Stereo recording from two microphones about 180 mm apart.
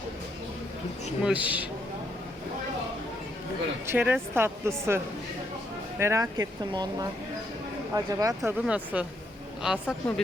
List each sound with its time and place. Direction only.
1.2 s a woman's voice: 10° right (ahead or behind)
3.8 s a woman's voice: 10° right (ahead or behind)
6.0 s speech: 15° right (ahead or behind)
8.4 s a woman's voice: 5° right (ahead or behind)